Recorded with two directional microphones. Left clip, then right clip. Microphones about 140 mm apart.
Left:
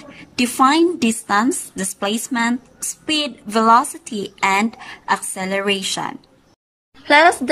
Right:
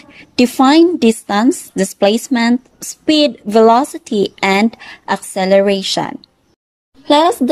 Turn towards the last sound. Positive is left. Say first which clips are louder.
# right 1 dB
turn(degrees=-30)  # may be behind; listen again after turning